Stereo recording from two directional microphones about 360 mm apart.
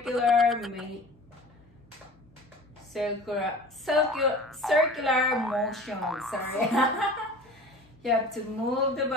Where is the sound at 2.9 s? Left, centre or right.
Centre.